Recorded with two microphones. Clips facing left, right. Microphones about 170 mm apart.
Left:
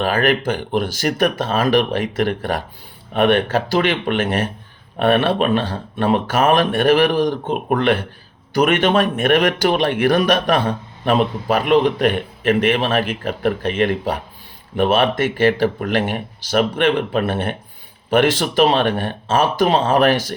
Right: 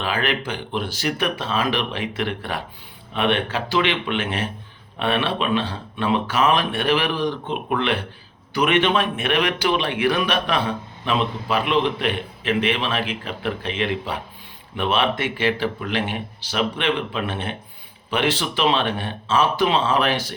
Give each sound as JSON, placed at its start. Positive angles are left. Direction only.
{"t": 0.0, "sound": "speech", "side_deg": 45}